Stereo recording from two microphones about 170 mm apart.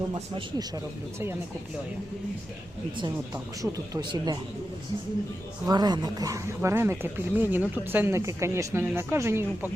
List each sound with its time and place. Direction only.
3.6 s speech: 20° right (ahead or behind)
5.6 s speech: 25° right (ahead or behind)